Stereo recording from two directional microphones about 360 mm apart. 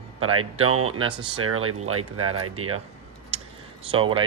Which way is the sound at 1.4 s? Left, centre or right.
Right.